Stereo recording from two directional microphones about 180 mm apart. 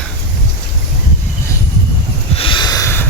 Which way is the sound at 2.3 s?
30° left (ahead or behind).